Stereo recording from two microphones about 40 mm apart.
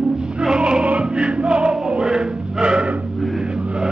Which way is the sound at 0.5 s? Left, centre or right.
Right.